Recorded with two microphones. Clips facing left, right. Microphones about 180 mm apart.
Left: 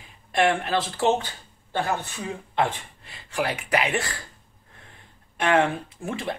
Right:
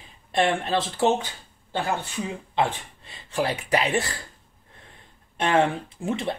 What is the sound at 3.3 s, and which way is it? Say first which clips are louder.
Speech: right 1 dB; 30° right (ahead or behind).